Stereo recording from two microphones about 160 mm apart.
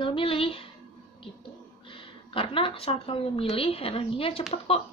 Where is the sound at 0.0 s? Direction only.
35° left (ahead or behind).